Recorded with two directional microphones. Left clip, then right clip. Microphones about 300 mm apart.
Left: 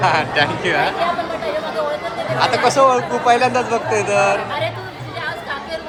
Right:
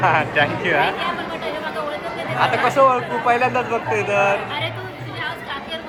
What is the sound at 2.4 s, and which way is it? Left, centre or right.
Speech, centre.